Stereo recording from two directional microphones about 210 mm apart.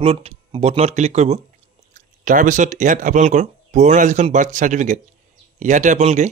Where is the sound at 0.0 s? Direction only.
25° right (ahead or behind).